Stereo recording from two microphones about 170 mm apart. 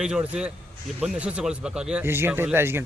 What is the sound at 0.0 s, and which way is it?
A man's voice, 5° right (ahead or behind).